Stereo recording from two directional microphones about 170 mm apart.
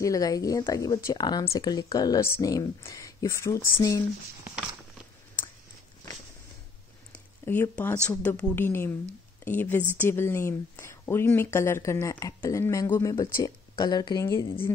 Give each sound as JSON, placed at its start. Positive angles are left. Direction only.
{"t": 0.0, "sound": "speech", "side_deg": 20}
{"t": 4.5, "sound": "walk", "side_deg": -5}
{"t": 7.1, "sound": "a woman's voice", "side_deg": 10}